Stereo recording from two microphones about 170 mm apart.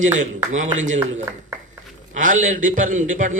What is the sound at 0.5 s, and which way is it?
Speech, 45° right (ahead or behind).